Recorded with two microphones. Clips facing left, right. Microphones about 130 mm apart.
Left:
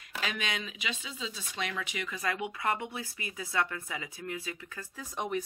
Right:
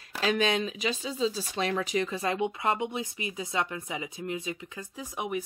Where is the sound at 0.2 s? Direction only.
35° right (ahead or behind).